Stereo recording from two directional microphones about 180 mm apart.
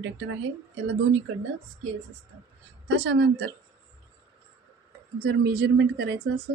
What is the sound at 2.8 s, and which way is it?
Speech, 75° right (ahead or behind).